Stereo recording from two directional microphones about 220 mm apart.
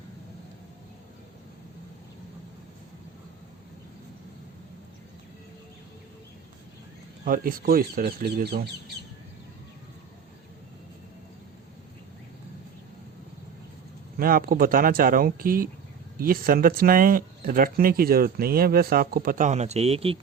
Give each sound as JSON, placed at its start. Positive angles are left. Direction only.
{"t": 7.3, "sound": "speech", "side_deg": -40}
{"t": 14.2, "sound": "speech", "side_deg": -40}